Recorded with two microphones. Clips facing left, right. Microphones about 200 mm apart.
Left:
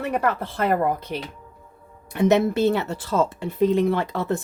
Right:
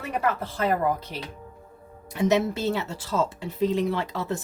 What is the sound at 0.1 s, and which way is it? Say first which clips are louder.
Speech: even; 55° left (ahead or behind).